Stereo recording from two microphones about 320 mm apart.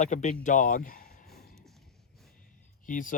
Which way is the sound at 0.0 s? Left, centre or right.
Left.